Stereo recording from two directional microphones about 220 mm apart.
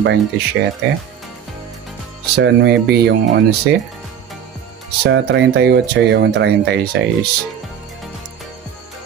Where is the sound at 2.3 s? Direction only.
50° right (ahead or behind).